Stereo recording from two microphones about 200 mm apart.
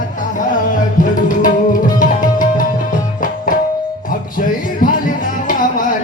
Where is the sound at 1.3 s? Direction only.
40° left (ahead or behind).